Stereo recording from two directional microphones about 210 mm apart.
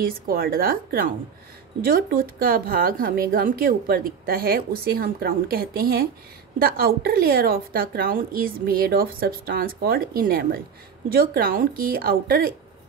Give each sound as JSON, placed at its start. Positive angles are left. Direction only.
{"t": 0.0, "sound": "a woman's voice", "side_deg": -45}